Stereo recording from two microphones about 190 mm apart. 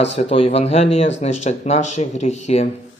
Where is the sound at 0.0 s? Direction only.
35° left (ahead or behind).